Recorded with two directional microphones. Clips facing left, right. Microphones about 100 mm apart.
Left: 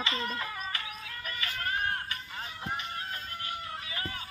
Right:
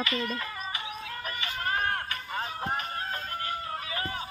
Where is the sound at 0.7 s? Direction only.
20° right (ahead or behind).